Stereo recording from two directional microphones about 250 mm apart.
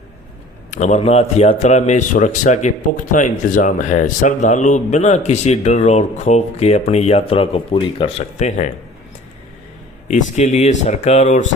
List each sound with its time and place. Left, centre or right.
0.7 s a man's voice: left
10.1 s a man's voice: left